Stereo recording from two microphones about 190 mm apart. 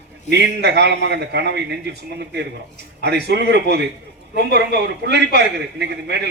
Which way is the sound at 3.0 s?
65° right (ahead or behind).